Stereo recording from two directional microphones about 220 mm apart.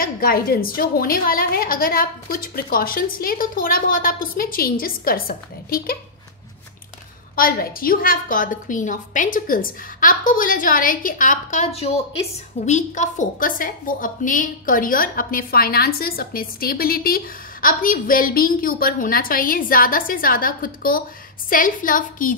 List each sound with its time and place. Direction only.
0.0 s a woman's voice: 40° left (ahead or behind)
7.3 s a woman's voice: 40° left (ahead or behind)